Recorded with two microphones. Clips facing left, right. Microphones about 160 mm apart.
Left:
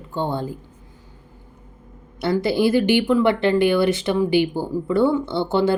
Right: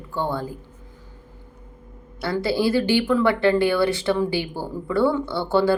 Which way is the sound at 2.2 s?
20° left (ahead or behind).